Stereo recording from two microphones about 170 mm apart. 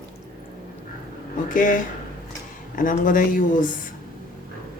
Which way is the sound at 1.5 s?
50° left (ahead or behind).